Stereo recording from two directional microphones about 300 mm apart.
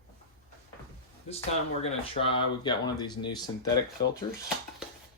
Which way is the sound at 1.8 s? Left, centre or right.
Centre.